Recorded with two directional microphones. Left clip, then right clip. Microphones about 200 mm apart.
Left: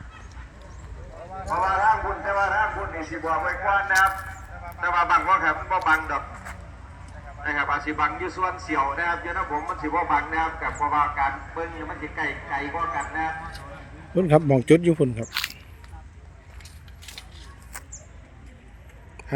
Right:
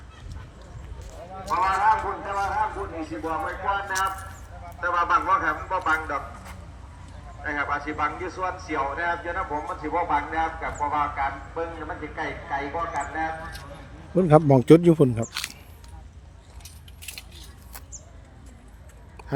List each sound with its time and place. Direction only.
1.5 s a sound: 20° left (ahead or behind)
3.1 s speech: 20° left (ahead or behind)
4.8 s a man's voice: 50° left (ahead or behind)
7.4 s speech: 55° left (ahead or behind)
14.2 s speech: 15° right (ahead or behind)
15.3 s speech: 15° left (ahead or behind)
17.0 s cutlery: 60° right (ahead or behind)